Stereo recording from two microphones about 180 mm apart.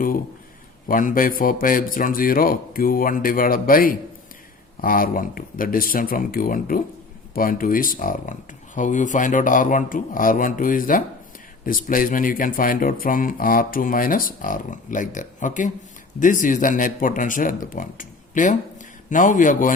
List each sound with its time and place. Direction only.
0.9 s speech: 50° left (ahead or behind)